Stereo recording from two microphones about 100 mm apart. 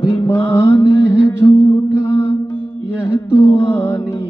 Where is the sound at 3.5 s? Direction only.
25° left (ahead or behind).